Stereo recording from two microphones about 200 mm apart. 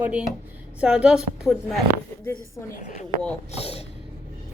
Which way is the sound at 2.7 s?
35° left (ahead or behind).